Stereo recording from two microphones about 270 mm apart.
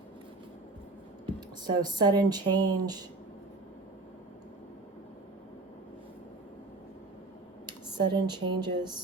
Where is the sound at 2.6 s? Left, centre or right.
Right.